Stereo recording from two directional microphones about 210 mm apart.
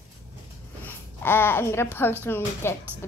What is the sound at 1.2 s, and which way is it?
Speech, 10° left (ahead or behind).